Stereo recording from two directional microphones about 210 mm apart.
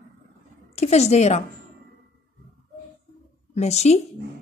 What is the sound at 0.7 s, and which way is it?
Speech, 30° left (ahead or behind).